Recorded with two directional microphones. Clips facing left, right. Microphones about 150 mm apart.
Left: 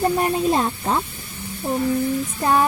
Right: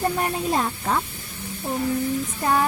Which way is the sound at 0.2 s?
25° left (ahead or behind).